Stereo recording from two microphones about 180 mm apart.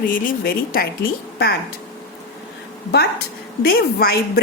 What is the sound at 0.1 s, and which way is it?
Speech, 50° left (ahead or behind).